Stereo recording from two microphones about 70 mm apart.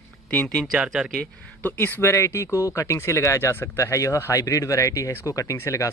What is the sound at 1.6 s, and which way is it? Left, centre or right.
Speech, left.